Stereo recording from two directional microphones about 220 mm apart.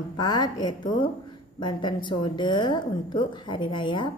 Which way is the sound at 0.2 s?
20° left (ahead or behind).